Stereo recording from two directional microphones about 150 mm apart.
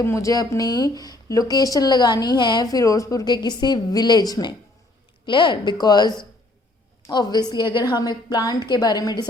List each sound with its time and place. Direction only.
0.0 s speech: 20° left (ahead or behind)